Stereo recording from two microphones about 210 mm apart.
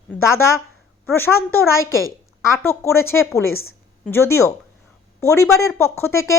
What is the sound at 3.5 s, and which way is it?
Speech, 80° left.